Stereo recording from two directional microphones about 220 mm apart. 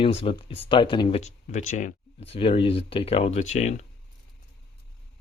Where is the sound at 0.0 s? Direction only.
25° left (ahead or behind).